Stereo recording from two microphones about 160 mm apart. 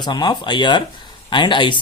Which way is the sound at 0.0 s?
25° left (ahead or behind).